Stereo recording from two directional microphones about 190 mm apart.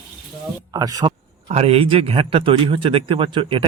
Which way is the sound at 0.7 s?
20° right (ahead or behind).